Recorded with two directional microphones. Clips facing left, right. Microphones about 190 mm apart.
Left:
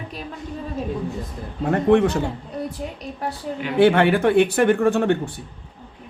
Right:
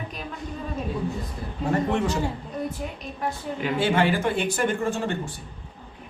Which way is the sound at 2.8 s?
30° left (ahead or behind).